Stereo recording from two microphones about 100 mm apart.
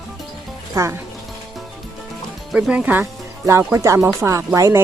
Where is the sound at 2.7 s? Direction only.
15° right (ahead or behind).